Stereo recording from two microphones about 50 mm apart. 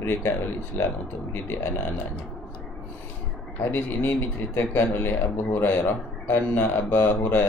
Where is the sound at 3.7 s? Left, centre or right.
Left.